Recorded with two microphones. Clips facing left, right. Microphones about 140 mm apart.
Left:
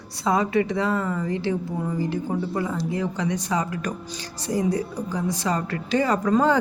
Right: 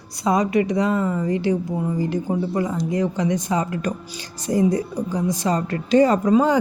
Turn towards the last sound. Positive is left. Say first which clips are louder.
# right 3 dB
turn(degrees=-15)  # may be behind; listen again after turning